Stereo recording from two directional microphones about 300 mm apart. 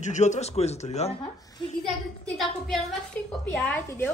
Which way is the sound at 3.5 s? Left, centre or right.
Centre.